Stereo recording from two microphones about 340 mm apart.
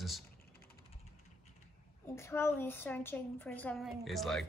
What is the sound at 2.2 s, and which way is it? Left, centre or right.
A woman's voice, centre.